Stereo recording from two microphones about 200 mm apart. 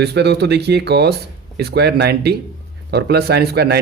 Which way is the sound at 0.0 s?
55° right (ahead or behind).